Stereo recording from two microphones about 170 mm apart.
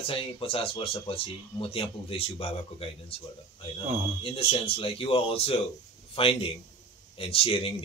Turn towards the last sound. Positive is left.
turn(degrees=30)  # may be behind; listen again after turning